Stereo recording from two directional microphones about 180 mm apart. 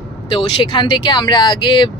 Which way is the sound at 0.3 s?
30° left (ahead or behind).